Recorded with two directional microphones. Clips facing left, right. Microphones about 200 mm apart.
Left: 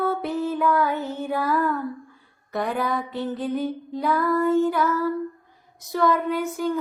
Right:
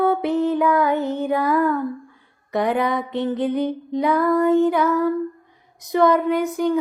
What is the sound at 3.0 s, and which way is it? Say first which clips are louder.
Music: right 5 dB; 20° right (ahead or behind).